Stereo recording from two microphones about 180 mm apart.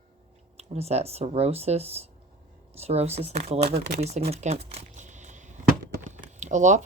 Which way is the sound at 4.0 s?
35° right (ahead or behind).